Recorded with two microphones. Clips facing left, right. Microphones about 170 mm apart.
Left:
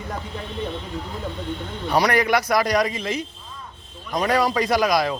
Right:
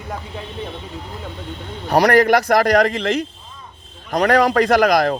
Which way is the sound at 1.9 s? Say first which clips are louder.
Right 6 dB; 45° right (ahead or behind).